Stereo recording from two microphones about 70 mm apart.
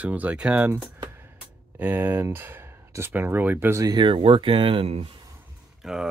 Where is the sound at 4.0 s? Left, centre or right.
Right.